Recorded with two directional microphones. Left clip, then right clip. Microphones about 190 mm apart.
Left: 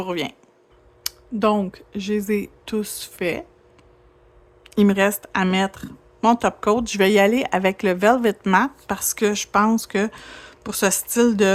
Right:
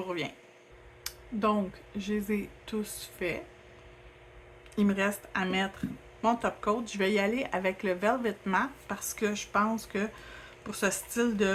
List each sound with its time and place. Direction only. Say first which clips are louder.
0.0 s speech: left 9 dB; 55° left (ahead or behind)
4.7 s speech: left 11 dB; 60° left (ahead or behind)